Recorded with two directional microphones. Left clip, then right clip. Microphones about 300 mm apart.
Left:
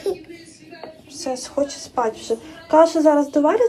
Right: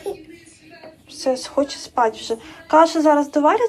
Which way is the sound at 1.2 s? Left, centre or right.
Centre.